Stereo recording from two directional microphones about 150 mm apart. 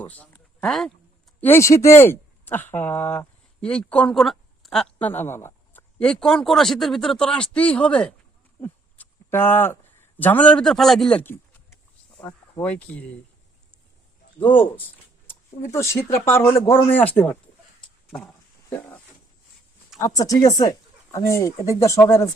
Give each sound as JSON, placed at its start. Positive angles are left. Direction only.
{"t": 0.0, "sound": "a sound", "side_deg": 10}
{"t": 1.4, "sound": "speech", "side_deg": 15}
{"t": 6.0, "sound": "speech", "side_deg": 5}
{"t": 8.6, "sound": "a sound", "side_deg": 15}
{"t": 10.2, "sound": "speech", "side_deg": 10}
{"t": 12.9, "sound": "speech", "side_deg": 5}
{"t": 15.7, "sound": "speech", "side_deg": 15}
{"t": 18.7, "sound": "a sound", "side_deg": 10}
{"t": 20.1, "sound": "speech", "side_deg": 25}